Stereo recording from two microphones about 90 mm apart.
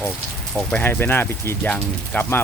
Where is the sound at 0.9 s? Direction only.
25° left (ahead or behind).